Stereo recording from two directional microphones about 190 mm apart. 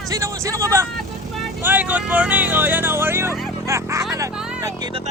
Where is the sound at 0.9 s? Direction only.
Centre (ahead or behind).